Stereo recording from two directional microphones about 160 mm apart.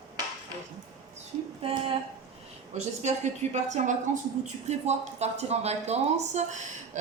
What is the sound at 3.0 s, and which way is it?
A woman's voice, 45° right (ahead or behind).